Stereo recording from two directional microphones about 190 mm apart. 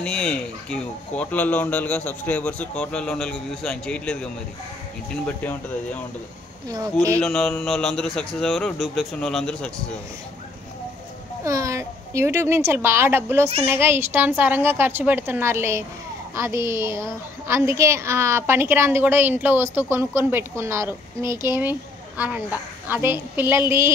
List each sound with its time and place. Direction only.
0.0 s speech: 5° left (ahead or behind)
6.7 s a woman's voice: 20° right (ahead or behind)
7.2 s speech: 5° left (ahead or behind)
11.4 s a child's voice: 15° right (ahead or behind)